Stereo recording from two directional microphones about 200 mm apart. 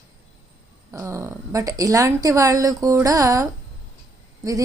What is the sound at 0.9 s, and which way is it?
A woman's voice, 15° right (ahead or behind).